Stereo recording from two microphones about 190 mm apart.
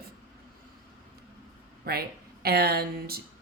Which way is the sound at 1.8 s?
55° right (ahead or behind).